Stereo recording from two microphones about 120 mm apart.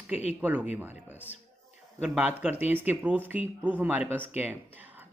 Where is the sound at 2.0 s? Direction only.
15° right (ahead or behind).